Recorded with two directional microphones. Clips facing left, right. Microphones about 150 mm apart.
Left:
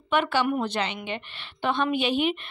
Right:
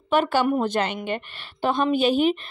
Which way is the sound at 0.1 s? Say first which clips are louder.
Right 3 dB; 40° right (ahead or behind).